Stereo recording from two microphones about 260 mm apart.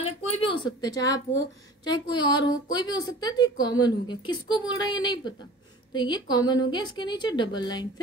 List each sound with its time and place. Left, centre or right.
0.0 s a woman's voice: centre